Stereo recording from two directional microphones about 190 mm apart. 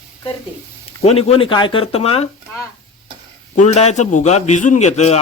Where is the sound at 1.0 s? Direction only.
30° left (ahead or behind).